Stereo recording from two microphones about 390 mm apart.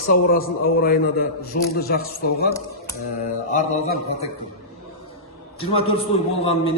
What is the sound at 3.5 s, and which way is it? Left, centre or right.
Speech, centre.